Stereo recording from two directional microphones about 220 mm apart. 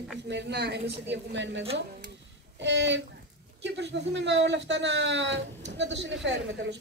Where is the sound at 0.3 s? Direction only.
50° right (ahead or behind).